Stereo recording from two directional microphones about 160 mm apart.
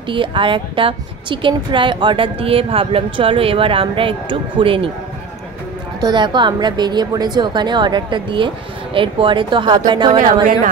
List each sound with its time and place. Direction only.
0.1 s a woman's voice: 30° right (ahead or behind)
5.9 s a woman's voice: 30° right (ahead or behind)